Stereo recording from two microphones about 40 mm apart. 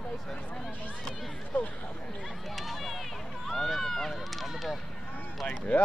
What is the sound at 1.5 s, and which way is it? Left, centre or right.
Speech, left.